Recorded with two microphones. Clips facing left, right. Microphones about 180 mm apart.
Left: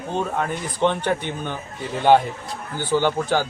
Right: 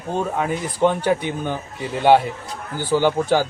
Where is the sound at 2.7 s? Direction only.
10° right (ahead or behind).